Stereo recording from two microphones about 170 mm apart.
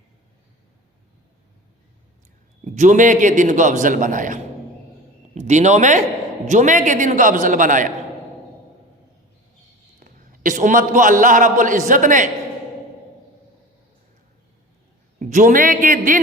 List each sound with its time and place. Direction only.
2.6 s a man's voice: 45° right (ahead or behind)
10.0 s a man's voice: 50° right (ahead or behind)
15.2 s a man's voice: 50° right (ahead or behind)